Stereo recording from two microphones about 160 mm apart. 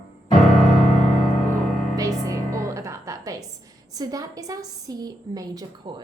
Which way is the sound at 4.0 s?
20° right (ahead or behind).